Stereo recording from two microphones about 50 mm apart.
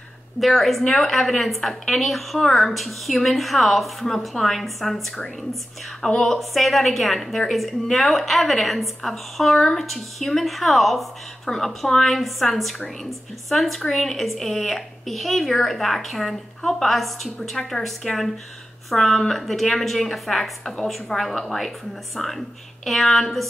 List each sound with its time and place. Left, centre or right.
0.4 s a woman's voice: centre
6.2 s a woman's voice: centre